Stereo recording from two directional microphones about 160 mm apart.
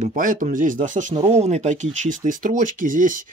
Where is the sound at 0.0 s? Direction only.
55° right (ahead or behind).